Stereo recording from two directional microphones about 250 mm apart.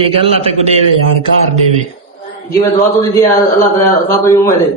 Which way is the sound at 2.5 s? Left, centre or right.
Centre.